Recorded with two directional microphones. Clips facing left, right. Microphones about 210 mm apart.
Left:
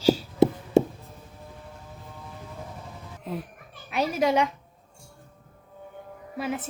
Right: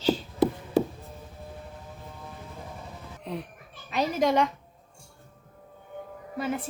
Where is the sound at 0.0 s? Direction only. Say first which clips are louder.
Left 4 dB; 10° left (ahead or behind).